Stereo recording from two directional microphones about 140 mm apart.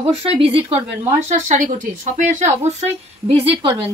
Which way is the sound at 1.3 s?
65° right (ahead or behind).